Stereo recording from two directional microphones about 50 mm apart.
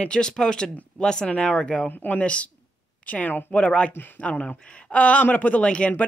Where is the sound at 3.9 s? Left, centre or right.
Left.